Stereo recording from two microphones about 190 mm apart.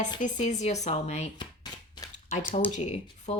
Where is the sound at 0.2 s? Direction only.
40° left (ahead or behind).